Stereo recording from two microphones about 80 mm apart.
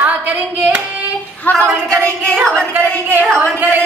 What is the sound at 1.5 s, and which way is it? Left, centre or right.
Speech, left.